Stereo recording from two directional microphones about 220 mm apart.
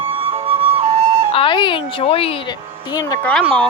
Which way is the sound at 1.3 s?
25° left (ahead or behind).